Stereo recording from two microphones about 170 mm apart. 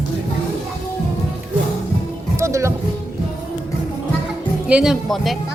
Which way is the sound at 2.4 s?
15° right (ahead or behind).